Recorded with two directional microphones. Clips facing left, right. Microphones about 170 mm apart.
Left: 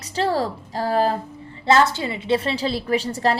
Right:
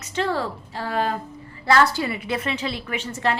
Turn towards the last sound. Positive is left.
turn(degrees=35)  # may be behind; listen again after turning